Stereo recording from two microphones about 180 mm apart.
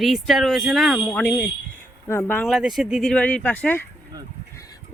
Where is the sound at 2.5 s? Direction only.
Centre (ahead or behind).